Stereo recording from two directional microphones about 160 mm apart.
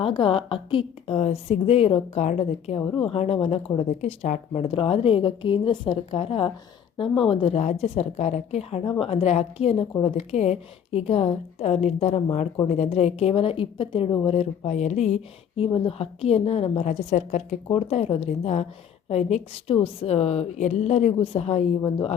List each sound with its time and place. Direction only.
0.0 s a woman's voice: 35° left (ahead or behind)
17.7 s a woman's voice: 35° left (ahead or behind)